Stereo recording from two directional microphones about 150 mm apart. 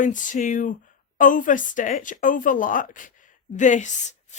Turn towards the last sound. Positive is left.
turn(degrees=50)  # may be behind; listen again after turning